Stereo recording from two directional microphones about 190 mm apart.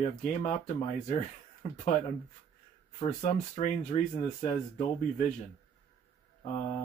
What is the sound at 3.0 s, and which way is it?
Speech, 40° left (ahead or behind).